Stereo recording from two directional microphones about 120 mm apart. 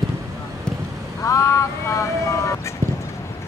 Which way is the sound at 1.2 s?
30° left (ahead or behind).